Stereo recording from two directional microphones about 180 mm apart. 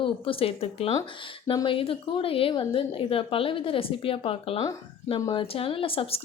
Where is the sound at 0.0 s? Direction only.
30° left (ahead or behind).